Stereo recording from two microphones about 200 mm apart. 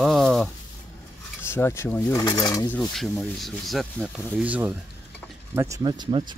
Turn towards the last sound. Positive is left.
turn(degrees=-25)  # may be behind; listen again after turning